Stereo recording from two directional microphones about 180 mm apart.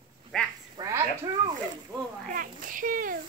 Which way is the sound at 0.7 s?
15° right (ahead or behind).